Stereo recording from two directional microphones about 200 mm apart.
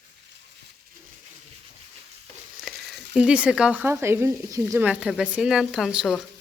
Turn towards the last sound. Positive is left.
turn(degrees=0)  # may be behind; listen again after turning